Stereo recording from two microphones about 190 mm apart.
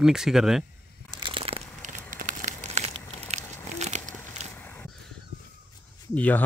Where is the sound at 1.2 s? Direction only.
25° right (ahead or behind).